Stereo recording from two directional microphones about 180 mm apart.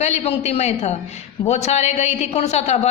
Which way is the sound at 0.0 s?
40° left (ahead or behind).